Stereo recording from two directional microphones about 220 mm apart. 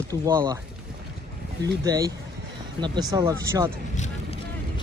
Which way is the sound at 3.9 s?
35° left (ahead or behind).